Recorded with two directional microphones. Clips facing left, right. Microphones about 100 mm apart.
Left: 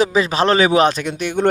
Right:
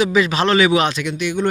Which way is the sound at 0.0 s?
35° left (ahead or behind).